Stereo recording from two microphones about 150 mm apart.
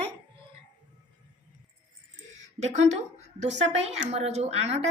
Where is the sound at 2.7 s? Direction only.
50° right (ahead or behind).